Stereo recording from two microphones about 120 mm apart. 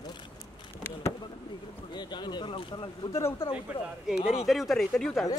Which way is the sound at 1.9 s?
40° left (ahead or behind).